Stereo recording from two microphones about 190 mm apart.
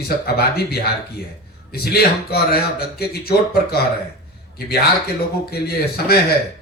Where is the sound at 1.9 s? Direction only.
55° left (ahead or behind).